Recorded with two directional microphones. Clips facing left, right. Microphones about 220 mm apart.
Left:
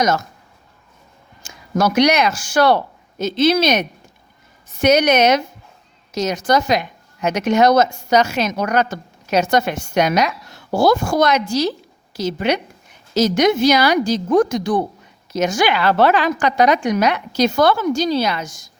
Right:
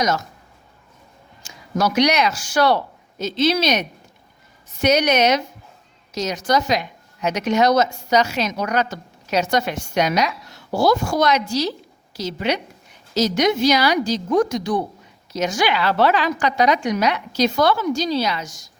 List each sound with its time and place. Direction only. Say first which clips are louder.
1.4 s a woman's voice: left 3 dB; 50° left (ahead or behind)